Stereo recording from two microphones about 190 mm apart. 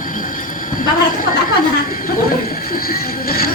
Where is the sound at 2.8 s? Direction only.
50° left (ahead or behind).